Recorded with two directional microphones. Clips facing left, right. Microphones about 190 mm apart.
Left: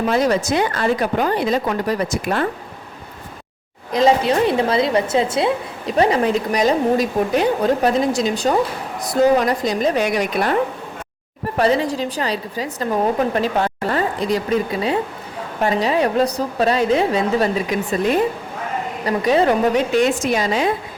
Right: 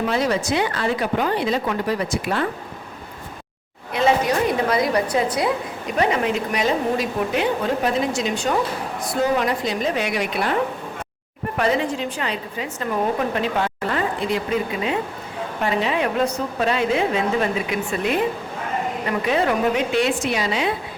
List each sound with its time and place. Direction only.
0.1 s speech: 45° left (ahead or behind)
3.9 s a woman's voice: 30° left (ahead or behind)
11.5 s a woman's voice: 35° left (ahead or behind)